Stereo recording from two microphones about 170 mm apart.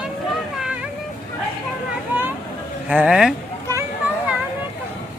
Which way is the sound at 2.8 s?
5° right (ahead or behind).